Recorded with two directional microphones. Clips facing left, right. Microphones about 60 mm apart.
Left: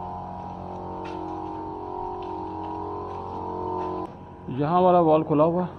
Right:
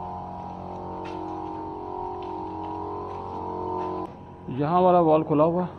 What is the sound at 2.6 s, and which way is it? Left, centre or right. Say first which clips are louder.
Music: even; centre.